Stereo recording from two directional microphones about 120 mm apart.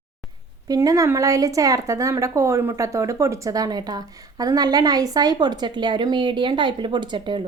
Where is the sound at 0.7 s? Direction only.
30° right (ahead or behind).